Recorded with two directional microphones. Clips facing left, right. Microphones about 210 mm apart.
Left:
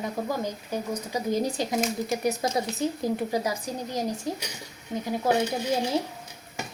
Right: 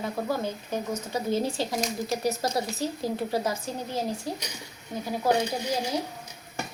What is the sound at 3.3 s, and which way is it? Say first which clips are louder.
Speech: even; 15° left (ahead or behind).